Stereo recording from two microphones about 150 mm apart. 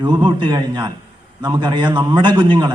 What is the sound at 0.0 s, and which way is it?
A man's voice, 30° right (ahead or behind).